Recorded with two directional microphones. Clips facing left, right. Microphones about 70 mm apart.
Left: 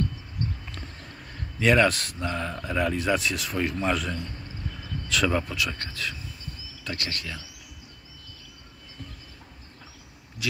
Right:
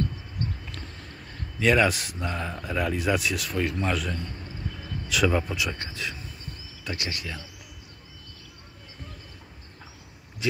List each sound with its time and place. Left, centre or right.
1.6 s speech: centre
10.4 s speech: right